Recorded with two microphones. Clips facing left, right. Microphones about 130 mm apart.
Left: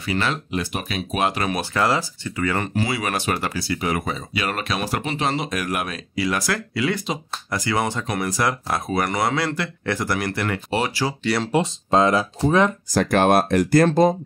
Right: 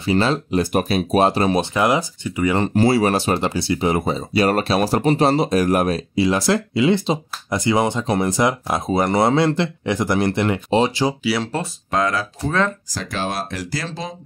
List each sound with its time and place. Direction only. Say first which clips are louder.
0.0 s speech: right 6 dB; 30° right (ahead or behind)
2.6 s speech: right 8 dB; 35° right (ahead or behind); by 11.1 s 20° right (ahead or behind)
11.2 s speech: right 1 dB; centre (ahead or behind)
11.5 s speech: left 4 dB; 25° left (ahead or behind)
12.9 s speech: left 9 dB; 60° left (ahead or behind)